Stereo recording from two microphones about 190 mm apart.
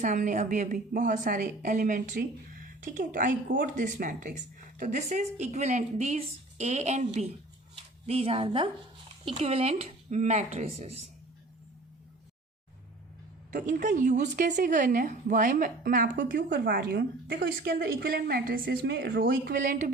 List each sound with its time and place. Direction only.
0.0 s a woman's voice: 40° right (ahead or behind)
13.5 s a woman's voice: 45° right (ahead or behind); by 19.2 s 65° right (ahead or behind)
19.2 s a woman's voice: 45° right (ahead or behind)